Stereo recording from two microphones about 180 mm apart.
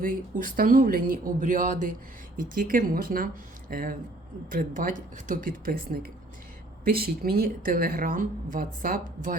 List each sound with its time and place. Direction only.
0.5 s a woman's voice: 55° right (ahead or behind)